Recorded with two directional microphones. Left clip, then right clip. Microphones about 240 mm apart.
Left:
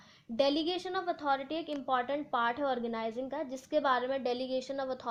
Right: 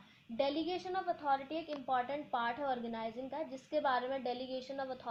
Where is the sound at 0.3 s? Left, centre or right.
Left.